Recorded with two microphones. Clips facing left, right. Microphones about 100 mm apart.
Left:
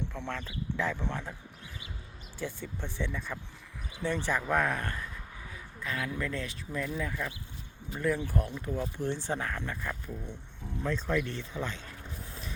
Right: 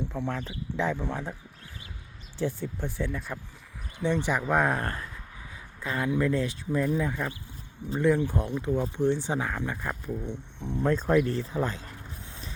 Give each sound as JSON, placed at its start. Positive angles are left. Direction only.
{"t": 0.0, "sound": "speech", "side_deg": -10}
{"t": 2.4, "sound": "speech", "side_deg": -10}
{"t": 4.6, "sound": "speech", "side_deg": -35}
{"t": 9.8, "sound": "speech", "side_deg": -25}
{"t": 10.8, "sound": "speech", "side_deg": -45}
{"t": 11.1, "sound": "speech", "side_deg": -35}
{"t": 12.2, "sound": "vehicle", "side_deg": -30}